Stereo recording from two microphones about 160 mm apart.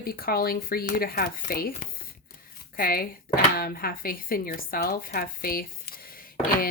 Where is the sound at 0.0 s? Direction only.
70° left (ahead or behind).